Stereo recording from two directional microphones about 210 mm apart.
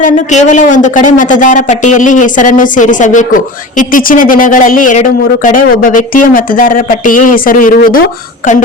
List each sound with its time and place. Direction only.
0.0 s speech: 35° left (ahead or behind)